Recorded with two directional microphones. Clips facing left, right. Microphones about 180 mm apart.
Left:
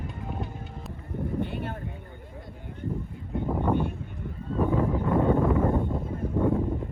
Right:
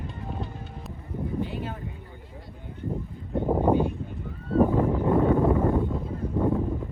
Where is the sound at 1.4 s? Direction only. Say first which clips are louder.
Even; 60° left (ahead or behind).